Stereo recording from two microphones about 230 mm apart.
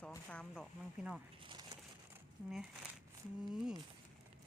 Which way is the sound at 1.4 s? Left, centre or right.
Right.